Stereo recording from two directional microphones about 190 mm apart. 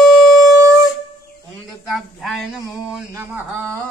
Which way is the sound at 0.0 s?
Centre (ahead or behind).